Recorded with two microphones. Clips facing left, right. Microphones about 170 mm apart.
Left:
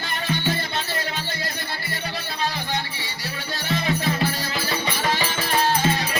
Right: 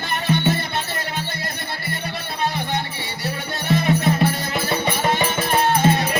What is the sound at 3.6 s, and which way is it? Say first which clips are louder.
Music: right 5 dB; 55° right (ahead or behind).